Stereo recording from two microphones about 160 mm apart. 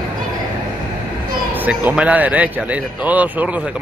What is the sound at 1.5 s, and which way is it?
A man's voice, 10° right (ahead or behind).